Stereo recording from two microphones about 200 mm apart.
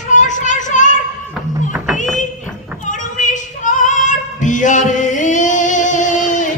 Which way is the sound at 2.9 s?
40° left (ahead or behind).